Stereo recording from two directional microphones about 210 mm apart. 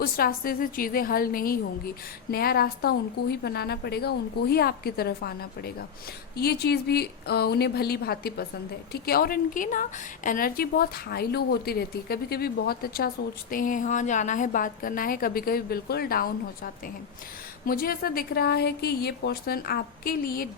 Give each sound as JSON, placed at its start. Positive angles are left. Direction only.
{"t": 0.0, "sound": "a woman's voice", "side_deg": 45}
{"t": 17.7, "sound": "a woman's voice", "side_deg": 45}